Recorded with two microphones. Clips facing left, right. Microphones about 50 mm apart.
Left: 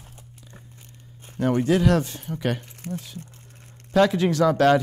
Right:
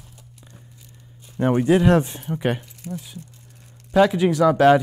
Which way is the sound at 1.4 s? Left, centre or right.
Right.